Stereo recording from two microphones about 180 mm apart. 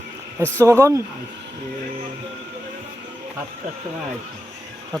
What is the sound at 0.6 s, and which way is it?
Speech, 15° right (ahead or behind).